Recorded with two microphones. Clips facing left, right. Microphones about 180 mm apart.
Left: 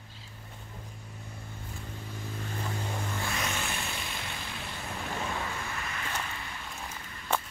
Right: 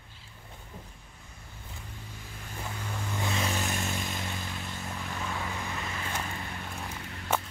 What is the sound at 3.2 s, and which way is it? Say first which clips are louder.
Vehicle: right 6 dB; 25° right (ahead or behind).